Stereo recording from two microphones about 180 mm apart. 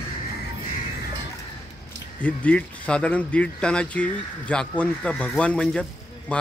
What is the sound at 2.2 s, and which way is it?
Speech, 10° left (ahead or behind).